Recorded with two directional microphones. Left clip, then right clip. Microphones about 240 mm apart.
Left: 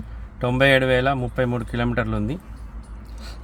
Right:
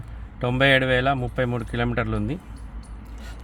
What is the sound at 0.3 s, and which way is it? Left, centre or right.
Speech, centre.